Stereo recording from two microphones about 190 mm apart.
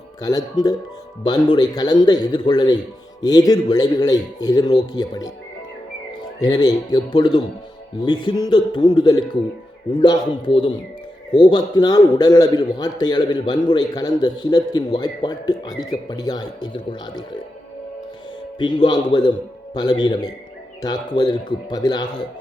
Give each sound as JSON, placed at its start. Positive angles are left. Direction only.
{"t": 0.2, "sound": "a man's voice", "side_deg": 20}
{"t": 6.4, "sound": "a man's voice", "side_deg": 20}
{"t": 18.6, "sound": "a man's voice", "side_deg": 25}